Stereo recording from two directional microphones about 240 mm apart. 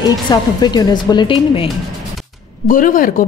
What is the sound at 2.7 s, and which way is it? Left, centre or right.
Speech, left.